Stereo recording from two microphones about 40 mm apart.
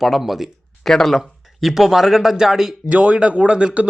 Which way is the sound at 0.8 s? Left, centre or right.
Centre.